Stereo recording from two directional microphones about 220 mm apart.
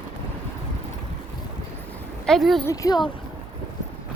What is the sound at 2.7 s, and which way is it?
Speech, 15° left (ahead or behind).